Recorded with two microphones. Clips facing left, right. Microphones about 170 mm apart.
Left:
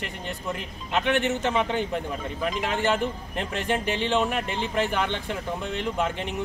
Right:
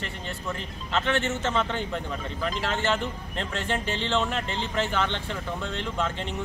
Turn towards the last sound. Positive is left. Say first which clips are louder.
# left 2 dB
turn(degrees=15)  # may be behind; listen again after turning